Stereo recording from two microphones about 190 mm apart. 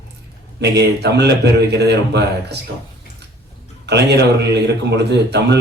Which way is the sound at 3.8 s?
60° right (ahead or behind).